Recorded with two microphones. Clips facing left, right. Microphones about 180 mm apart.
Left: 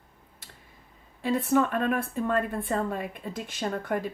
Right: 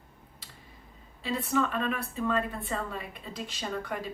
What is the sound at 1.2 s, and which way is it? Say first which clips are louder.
Speech: left 5 dB; 50° left (ahead or behind).